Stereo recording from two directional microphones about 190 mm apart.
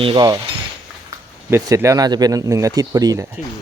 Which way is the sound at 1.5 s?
15° right (ahead or behind).